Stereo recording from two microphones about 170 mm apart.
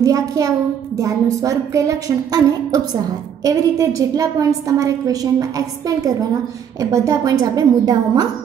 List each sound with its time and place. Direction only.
0.0 s a woman's voice: 20° right (ahead or behind)